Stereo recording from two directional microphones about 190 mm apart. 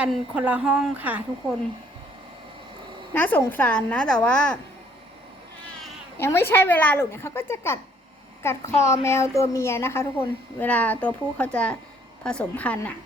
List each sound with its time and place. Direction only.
0.0 s a woman's voice: 5° right (ahead or behind)
3.1 s a woman's voice: 10° left (ahead or behind)
6.1 s a woman's voice: 10° left (ahead or behind)